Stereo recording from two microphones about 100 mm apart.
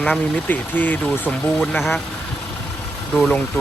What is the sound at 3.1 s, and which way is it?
Speech, 10° left (ahead or behind).